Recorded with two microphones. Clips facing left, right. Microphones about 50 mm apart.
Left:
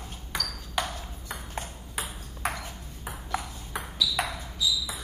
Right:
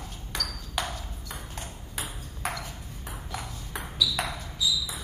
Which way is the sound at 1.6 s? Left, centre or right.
Centre.